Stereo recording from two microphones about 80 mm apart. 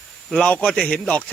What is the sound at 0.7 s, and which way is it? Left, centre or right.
Speech, centre.